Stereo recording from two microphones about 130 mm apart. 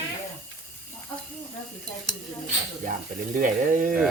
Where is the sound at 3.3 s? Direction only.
90° right.